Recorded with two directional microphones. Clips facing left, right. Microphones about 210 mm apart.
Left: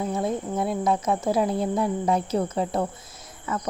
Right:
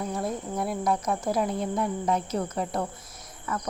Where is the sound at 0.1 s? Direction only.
25° left (ahead or behind).